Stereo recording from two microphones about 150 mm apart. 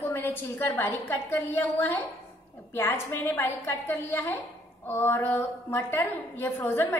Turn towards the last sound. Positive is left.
turn(degrees=15)  # may be behind; listen again after turning